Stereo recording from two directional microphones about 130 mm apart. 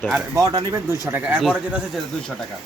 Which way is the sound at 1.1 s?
10° right (ahead or behind).